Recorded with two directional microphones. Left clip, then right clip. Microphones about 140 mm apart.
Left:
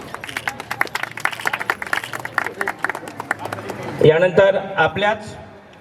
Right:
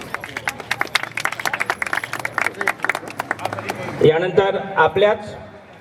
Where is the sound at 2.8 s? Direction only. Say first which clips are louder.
Right 2 dB; 25° right (ahead or behind).